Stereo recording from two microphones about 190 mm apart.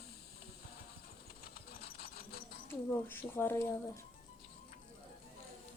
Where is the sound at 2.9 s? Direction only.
10° left (ahead or behind).